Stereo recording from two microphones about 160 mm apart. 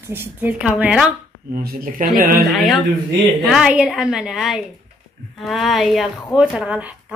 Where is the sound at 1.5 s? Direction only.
65° right (ahead or behind).